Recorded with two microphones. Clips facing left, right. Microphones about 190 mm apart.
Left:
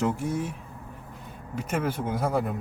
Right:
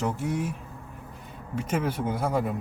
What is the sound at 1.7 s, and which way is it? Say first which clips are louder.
Speech: even; 5° right (ahead or behind).